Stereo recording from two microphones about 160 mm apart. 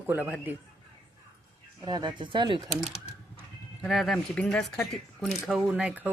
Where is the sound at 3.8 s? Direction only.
Centre (ahead or behind).